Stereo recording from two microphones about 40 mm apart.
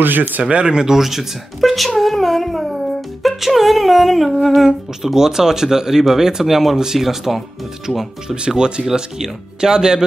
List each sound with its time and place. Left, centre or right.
0.0 s speech: right
0.4 s speech: right
0.9 s humming: centre
4.6 s speech: centre